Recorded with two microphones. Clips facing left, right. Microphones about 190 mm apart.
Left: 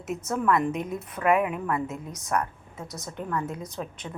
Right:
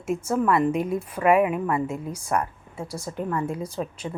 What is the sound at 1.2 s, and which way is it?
A woman's voice, 10° right (ahead or behind).